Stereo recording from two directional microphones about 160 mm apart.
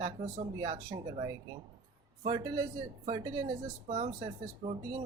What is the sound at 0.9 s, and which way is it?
Speech, 25° right (ahead or behind).